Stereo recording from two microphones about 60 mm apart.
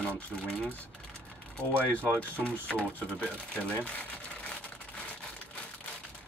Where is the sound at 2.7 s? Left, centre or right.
Left.